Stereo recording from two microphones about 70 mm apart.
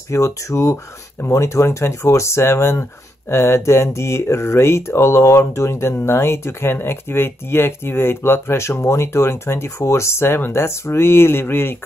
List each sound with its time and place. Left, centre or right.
0.1 s speech: left